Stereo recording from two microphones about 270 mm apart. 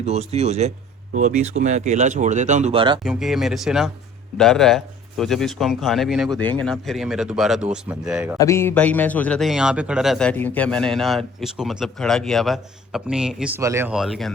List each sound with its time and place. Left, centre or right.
0.0 s speech: right
3.0 s a man's voice: centre
8.4 s a man's voice: centre